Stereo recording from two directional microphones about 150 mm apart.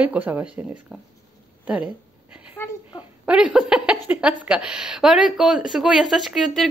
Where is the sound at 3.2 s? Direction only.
5° right (ahead or behind).